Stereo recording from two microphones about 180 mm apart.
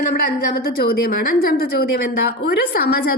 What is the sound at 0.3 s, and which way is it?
A woman's voice, 55° left (ahead or behind).